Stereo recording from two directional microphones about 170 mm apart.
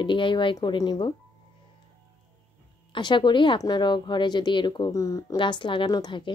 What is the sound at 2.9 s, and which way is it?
A woman's voice, 25° left (ahead or behind).